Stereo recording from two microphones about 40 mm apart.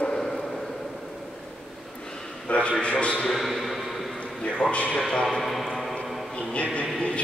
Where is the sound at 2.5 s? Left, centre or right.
Left.